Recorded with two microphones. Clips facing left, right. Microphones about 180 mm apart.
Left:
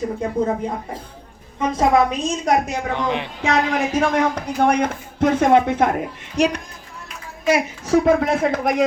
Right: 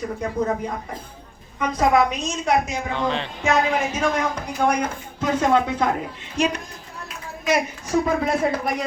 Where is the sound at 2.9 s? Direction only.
15° left (ahead or behind).